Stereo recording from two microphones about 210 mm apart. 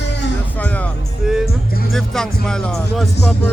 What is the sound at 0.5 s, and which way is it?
Music, 5° left (ahead or behind).